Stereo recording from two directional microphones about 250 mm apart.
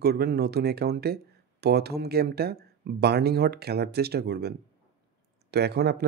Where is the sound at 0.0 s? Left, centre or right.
Right.